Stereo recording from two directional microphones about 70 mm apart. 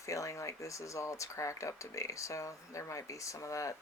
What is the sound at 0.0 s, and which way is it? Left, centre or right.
Speech, left.